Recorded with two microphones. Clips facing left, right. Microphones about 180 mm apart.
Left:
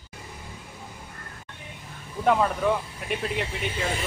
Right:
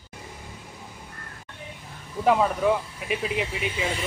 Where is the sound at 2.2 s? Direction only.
5° right (ahead or behind).